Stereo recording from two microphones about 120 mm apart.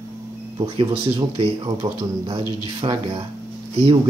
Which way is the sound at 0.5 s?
50° right (ahead or behind).